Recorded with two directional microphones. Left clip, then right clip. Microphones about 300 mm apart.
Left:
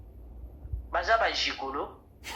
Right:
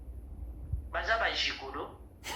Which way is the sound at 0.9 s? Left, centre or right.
Centre.